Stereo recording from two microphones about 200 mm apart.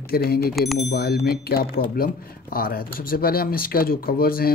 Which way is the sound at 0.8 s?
55° left (ahead or behind).